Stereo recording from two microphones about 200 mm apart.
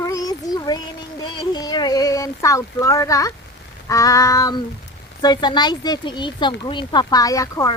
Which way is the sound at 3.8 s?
15° left (ahead or behind).